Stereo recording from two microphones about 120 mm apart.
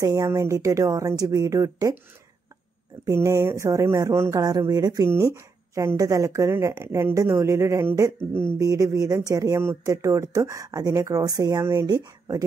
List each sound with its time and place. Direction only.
0.0 s a woman's voice: 30° right (ahead or behind)
3.1 s a woman's voice: 25° right (ahead or behind)
4.4 s a woman's voice: 35° right (ahead or behind)